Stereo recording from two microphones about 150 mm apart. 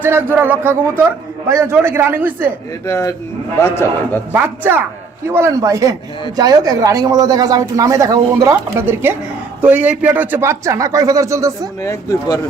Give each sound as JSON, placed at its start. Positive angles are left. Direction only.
{"t": 0.0, "sound": "speech", "side_deg": -15}
{"t": 2.8, "sound": "a man's voice", "side_deg": 20}
{"t": 4.3, "sound": "speech", "side_deg": -15}
{"t": 11.8, "sound": "speech", "side_deg": 20}